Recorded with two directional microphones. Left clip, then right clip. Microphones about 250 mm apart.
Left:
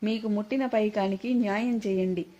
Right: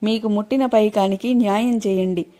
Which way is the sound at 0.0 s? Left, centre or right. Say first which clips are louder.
Right 9 dB; right.